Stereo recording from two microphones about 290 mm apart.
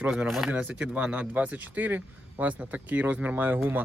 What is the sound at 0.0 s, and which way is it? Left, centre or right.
Speech, centre.